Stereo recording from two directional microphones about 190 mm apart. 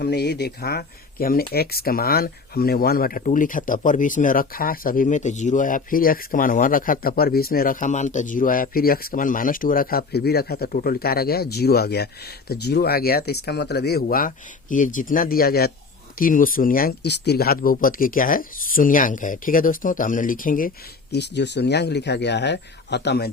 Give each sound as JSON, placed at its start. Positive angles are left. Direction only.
{"t": 0.0, "sound": "speech", "side_deg": 60}